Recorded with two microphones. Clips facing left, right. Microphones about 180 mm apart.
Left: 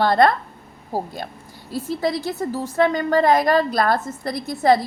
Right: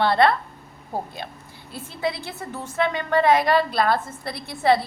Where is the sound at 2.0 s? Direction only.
40° left (ahead or behind).